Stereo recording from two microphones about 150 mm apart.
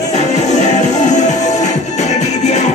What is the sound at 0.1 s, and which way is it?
Music, 50° left (ahead or behind).